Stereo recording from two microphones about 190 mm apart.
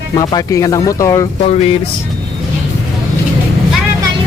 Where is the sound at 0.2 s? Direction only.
20° left (ahead or behind).